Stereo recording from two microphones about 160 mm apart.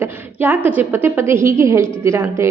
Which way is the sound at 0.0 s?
10° right (ahead or behind).